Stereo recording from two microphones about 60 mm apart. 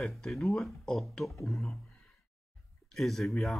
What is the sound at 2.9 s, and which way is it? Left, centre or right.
Speech, centre.